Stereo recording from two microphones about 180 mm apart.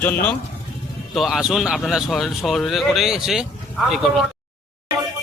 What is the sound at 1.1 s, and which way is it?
A man's voice, centre (ahead or behind).